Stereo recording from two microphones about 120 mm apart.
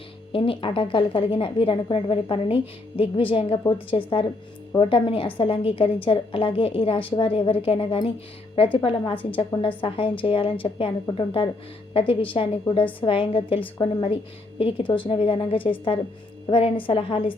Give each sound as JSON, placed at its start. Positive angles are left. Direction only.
{"t": 0.3, "sound": "a woman's voice", "side_deg": 50}